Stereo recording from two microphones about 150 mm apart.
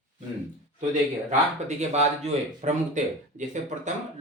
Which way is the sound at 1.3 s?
50° right (ahead or behind).